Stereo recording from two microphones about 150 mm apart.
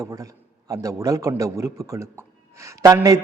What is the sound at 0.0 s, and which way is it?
A man's voice, 20° right (ahead or behind).